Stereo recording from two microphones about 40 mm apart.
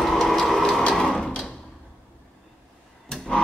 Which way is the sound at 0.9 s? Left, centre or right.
Centre.